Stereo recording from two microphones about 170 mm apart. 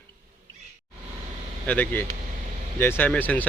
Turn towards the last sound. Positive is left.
turn(degrees=10)  # may be behind; listen again after turning